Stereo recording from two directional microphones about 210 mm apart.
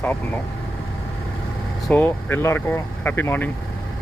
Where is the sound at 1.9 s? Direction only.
10° left (ahead or behind).